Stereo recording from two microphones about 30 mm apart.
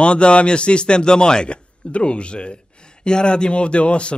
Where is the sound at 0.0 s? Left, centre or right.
Left.